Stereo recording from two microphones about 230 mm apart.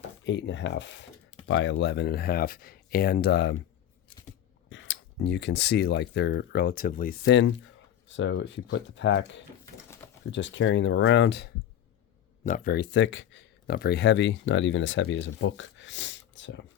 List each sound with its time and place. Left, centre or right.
0.3 s speech: left
4.7 s speech: left
7.3 s speech: left
12.5 s speech: left